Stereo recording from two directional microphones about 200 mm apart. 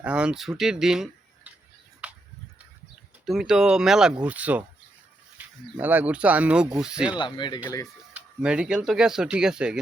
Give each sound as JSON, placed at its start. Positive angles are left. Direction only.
{"t": 0.0, "sound": "speech", "side_deg": -5}
{"t": 2.0, "sound": "a sound", "side_deg": -5}
{"t": 3.2, "sound": "speech", "side_deg": 0}
{"t": 5.4, "sound": "a sound", "side_deg": -10}
{"t": 5.7, "sound": "speech", "side_deg": -10}
{"t": 7.1, "sound": "speech", "side_deg": 25}
{"t": 8.1, "sound": "speech", "side_deg": -5}